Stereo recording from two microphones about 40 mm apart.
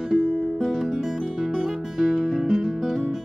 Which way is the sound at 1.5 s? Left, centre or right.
Centre.